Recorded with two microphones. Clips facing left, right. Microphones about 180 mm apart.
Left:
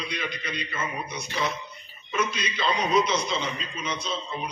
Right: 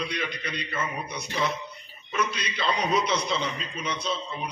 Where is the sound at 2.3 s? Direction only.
65° right (ahead or behind).